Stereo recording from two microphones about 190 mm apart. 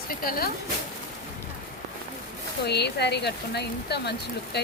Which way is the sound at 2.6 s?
60° left (ahead or behind).